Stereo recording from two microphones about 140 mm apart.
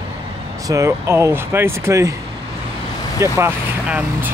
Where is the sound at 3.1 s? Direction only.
20° right (ahead or behind).